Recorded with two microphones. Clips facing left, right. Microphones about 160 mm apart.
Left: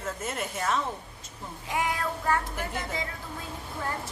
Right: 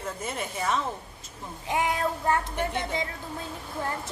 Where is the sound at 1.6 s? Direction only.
25° right (ahead or behind).